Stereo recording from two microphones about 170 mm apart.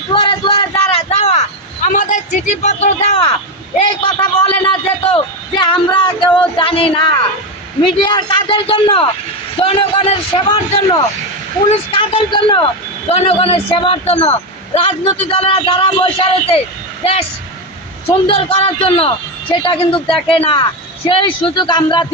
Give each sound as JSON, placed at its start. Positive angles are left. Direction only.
{"t": 0.1, "sound": "a sound", "side_deg": 30}
{"t": 1.9, "sound": "a man's voice", "side_deg": 50}
{"t": 18.3, "sound": "a man's voice", "side_deg": 35}